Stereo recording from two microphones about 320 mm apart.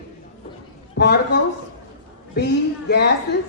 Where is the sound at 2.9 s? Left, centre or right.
Left.